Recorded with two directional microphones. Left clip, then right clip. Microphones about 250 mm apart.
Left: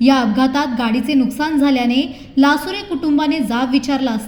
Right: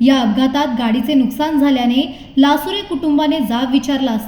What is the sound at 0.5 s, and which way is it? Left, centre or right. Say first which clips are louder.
A woman's voice: right 1 dB; centre.